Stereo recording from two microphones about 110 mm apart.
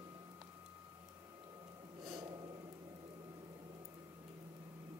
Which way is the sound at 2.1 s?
40° right (ahead or behind).